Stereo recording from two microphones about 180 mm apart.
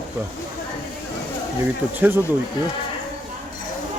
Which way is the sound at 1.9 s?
10° right (ahead or behind).